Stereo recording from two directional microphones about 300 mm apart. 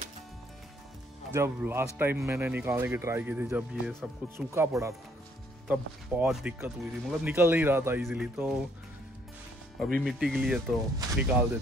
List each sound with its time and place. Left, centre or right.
1.3 s speech: centre
9.9 s speech: centre